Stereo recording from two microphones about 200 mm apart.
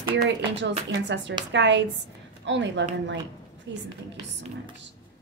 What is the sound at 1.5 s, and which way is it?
A woman's voice, 65° right (ahead or behind).